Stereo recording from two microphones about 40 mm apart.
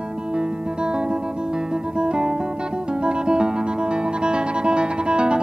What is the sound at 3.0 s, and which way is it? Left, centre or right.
Music, right.